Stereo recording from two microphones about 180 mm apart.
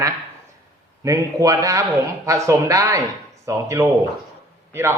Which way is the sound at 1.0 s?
20° right (ahead or behind).